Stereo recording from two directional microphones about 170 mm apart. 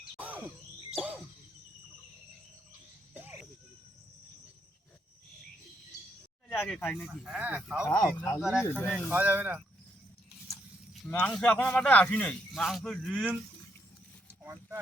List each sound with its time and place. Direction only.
0.2 s sigh: 10° right (ahead or behind)
0.9 s a sound: 10° right (ahead or behind)
6.5 s speech: 5° left (ahead or behind)
7.1 s speech: 5° right (ahead or behind)
7.9 s speech: 20° left (ahead or behind)
8.4 s speech: 5° right (ahead or behind)
11.1 s speech: 10° left (ahead or behind)